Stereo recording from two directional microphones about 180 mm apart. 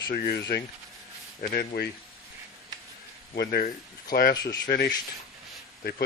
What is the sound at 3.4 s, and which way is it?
Speech, 60° left (ahead or behind).